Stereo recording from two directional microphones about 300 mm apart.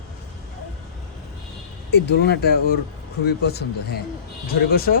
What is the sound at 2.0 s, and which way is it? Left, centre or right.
Speech, left.